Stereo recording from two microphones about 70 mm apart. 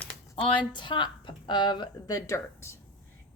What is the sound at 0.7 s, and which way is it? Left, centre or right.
A woman's voice, left.